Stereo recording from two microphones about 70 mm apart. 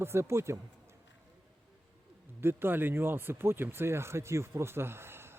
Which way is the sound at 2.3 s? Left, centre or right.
Right.